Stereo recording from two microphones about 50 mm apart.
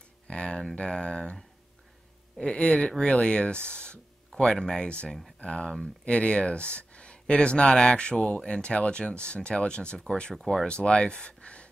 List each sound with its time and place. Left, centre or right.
0.3 s speech: centre